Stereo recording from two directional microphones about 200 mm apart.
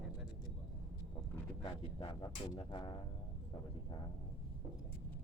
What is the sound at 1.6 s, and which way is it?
Speech, 20° left (ahead or behind).